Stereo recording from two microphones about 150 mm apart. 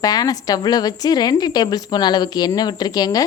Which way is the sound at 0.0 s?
25° left (ahead or behind).